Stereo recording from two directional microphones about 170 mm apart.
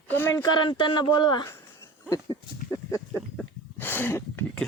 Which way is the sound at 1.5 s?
15° left (ahead or behind).